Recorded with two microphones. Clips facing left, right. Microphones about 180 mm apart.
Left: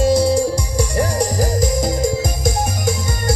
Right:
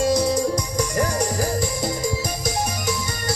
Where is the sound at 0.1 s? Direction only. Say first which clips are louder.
Left 5 dB; 30° left (ahead or behind).